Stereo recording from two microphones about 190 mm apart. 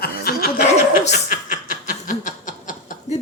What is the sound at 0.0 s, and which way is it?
Chuckle, 50° left (ahead or behind).